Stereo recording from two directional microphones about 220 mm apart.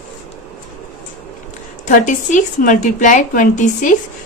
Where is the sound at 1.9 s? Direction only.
35° left (ahead or behind).